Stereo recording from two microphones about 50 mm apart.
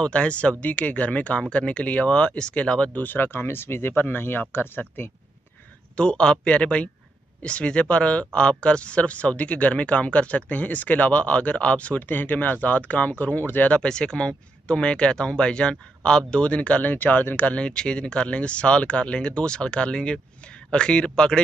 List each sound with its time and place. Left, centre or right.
0.0 s speech: left
3.1 s speech: left
5.9 s speech: centre
12.1 s speech: left
13.7 s speech: centre